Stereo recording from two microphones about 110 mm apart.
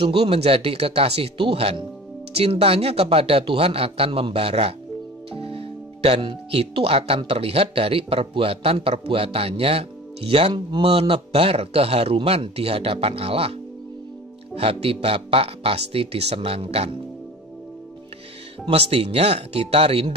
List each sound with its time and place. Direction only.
0.0 s speech: 55° right (ahead or behind)
18.7 s speech: 60° right (ahead or behind)